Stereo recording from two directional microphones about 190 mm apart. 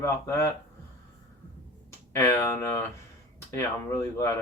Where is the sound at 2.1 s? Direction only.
15° left (ahead or behind).